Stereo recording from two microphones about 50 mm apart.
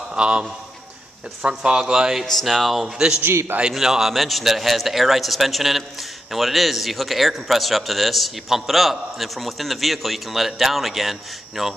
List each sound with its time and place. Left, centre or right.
0.1 s a man's voice: centre
2.2 s a man's voice: centre